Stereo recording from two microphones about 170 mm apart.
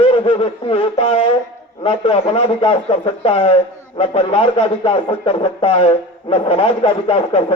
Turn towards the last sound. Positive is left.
turn(degrees=35)  # may be behind; listen again after turning